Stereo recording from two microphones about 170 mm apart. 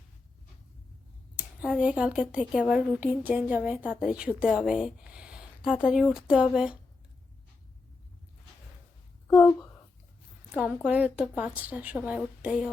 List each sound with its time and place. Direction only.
1.4 s a woman's voice: 5° right (ahead or behind)
9.2 s a sound: 15° left (ahead or behind)
10.5 s a woman's voice: 10° right (ahead or behind)